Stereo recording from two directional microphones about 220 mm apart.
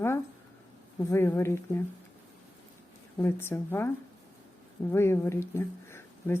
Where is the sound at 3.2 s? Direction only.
10° left (ahead or behind).